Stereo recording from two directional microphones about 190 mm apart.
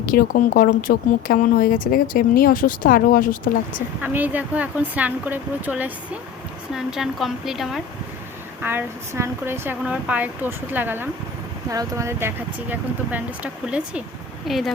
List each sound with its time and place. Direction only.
0.0 s speech: 50° left (ahead or behind)
4.0 s speech: 10° right (ahead or behind)
8.6 s speech: 15° right (ahead or behind)